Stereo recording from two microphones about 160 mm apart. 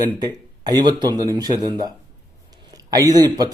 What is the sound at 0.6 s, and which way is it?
Speech, 25° right (ahead or behind).